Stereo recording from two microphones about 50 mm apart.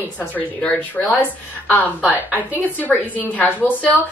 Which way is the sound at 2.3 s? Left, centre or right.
Left.